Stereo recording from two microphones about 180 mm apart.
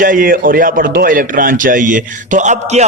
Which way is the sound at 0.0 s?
50° right (ahead or behind).